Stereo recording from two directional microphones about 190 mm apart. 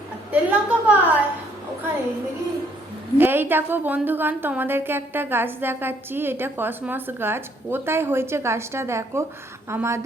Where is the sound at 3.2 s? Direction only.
10° right (ahead or behind).